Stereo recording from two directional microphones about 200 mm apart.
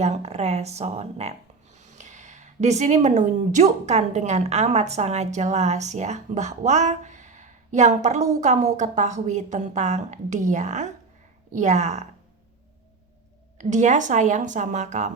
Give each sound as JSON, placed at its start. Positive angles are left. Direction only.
{"t": 0.0, "sound": "speech", "side_deg": -35}
{"t": 13.6, "sound": "speech", "side_deg": -40}